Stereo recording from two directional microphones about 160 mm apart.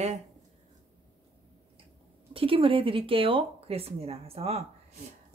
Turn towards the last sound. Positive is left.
turn(degrees=-40)  # may be behind; listen again after turning